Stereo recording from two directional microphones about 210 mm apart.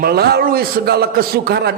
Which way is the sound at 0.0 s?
50° right (ahead or behind).